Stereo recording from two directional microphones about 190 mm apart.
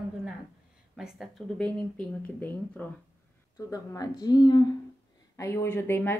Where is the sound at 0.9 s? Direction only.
Centre (ahead or behind).